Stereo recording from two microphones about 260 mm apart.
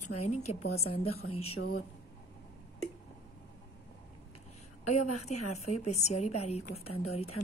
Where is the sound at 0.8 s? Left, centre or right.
Left.